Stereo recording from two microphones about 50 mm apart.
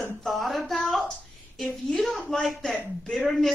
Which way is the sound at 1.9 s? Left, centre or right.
Centre.